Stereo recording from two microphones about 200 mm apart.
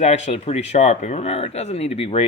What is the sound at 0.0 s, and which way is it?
Speech, 35° left (ahead or behind).